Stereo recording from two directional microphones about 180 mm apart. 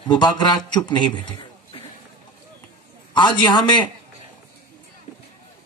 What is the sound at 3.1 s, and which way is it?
Speech, 25° left (ahead or behind).